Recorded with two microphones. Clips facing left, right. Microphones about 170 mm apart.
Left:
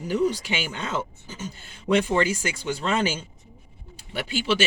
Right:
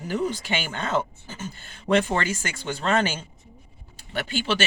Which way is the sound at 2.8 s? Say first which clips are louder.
Right 2 dB; 55° right (ahead or behind).